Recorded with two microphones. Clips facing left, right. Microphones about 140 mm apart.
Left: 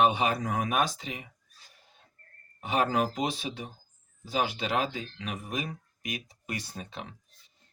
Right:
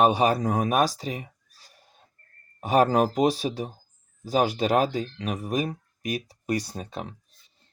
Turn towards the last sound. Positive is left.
turn(degrees=-40)  # may be behind; listen again after turning